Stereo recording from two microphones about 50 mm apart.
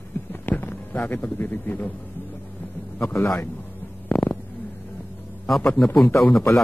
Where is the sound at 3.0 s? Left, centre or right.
Left.